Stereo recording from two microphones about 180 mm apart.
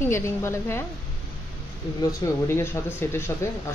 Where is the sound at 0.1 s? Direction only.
15° left (ahead or behind).